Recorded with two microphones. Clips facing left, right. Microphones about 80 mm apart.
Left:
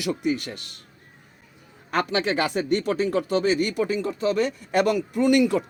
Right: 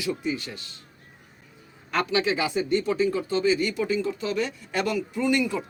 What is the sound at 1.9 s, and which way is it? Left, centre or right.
Speech, left.